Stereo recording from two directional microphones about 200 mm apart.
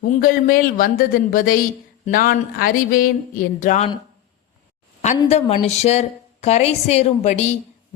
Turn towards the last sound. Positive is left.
turn(degrees=35)  # may be behind; listen again after turning